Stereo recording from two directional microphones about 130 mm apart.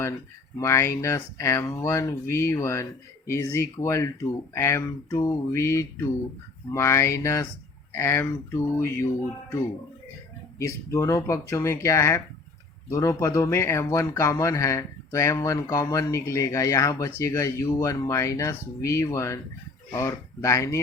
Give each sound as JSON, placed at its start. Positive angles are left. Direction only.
{"t": 0.6, "sound": "speech", "side_deg": 20}
{"t": 10.6, "sound": "speech", "side_deg": 25}